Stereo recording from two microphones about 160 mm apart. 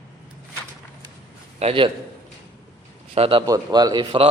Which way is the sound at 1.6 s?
35° right (ahead or behind).